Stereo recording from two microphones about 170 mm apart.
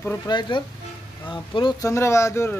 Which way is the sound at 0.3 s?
25° left (ahead or behind).